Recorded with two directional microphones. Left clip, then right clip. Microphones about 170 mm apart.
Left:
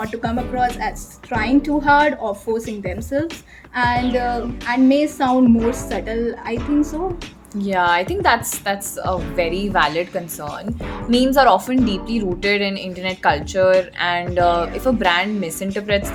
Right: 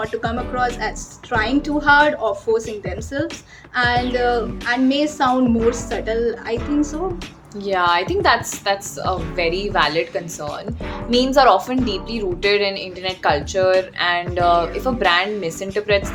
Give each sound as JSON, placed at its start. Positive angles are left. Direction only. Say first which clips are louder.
{"t": 0.1, "sound": "a woman's voice", "louder": "even", "side_deg": 35}